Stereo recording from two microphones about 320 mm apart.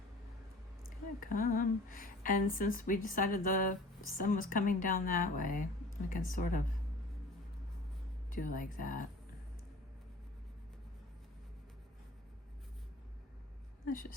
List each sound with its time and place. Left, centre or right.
1.2 s a woman's voice: left
8.3 s a woman's voice: left
13.8 s a woman's voice: left